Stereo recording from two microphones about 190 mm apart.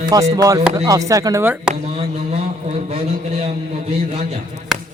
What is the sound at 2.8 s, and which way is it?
A man's voice, 30° right (ahead or behind).